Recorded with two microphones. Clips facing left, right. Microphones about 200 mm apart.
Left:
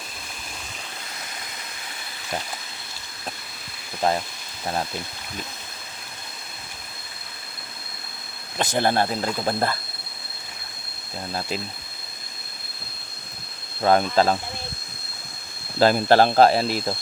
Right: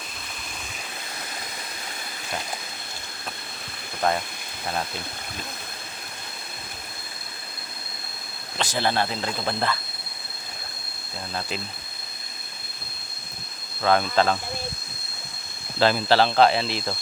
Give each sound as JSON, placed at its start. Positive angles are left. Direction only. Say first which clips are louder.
{"t": 8.7, "sound": "speech", "louder": "left 3 dB", "side_deg": 45}
{"t": 13.8, "sound": "speech", "louder": "left 2 dB", "side_deg": 35}
{"t": 15.8, "sound": "speech", "louder": "left 3 dB", "side_deg": 45}